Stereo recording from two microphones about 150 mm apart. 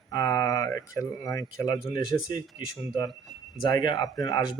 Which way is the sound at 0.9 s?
25° left (ahead or behind).